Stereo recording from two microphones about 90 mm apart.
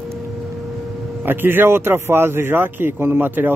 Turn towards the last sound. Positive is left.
turn(degrees=-20)  # may be behind; listen again after turning